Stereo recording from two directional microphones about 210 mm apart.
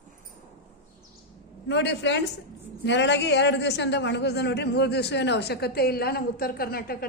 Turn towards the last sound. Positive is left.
turn(degrees=45)  # may be behind; listen again after turning